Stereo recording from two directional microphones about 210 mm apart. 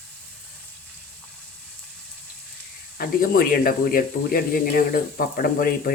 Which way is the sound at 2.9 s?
45° left (ahead or behind).